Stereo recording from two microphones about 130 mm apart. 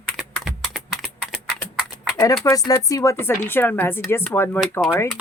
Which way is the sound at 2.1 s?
25° left (ahead or behind).